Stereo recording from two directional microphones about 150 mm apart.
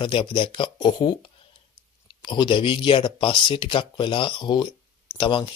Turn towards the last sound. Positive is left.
turn(degrees=35)  # may be behind; listen again after turning